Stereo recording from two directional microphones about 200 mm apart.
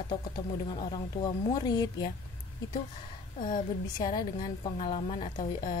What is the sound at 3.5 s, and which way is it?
A woman's voice, 20° left (ahead or behind).